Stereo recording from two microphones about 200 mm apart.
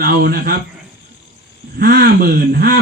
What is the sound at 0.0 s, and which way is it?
Speech, 50° right (ahead or behind).